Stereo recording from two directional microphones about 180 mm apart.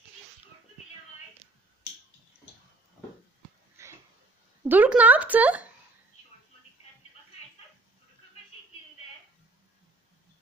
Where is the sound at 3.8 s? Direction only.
15° right (ahead or behind).